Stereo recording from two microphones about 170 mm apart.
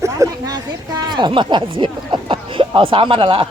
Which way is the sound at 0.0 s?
20° right (ahead or behind).